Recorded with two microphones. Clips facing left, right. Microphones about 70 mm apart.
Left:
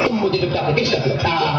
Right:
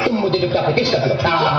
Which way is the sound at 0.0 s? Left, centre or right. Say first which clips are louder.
Right 1 dB; right.